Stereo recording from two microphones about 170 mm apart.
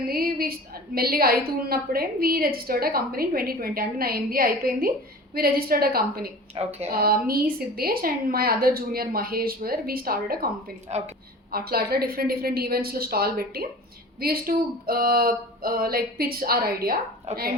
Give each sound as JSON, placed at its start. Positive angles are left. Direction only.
{"t": 0.0, "sound": "a woman's voice", "side_deg": -60}
{"t": 6.5, "sound": "speech", "side_deg": -35}
{"t": 6.9, "sound": "a woman's voice", "side_deg": -60}
{"t": 10.8, "sound": "speech", "side_deg": -40}
{"t": 11.5, "sound": "a woman's voice", "side_deg": -65}
{"t": 17.3, "sound": "speech", "side_deg": -40}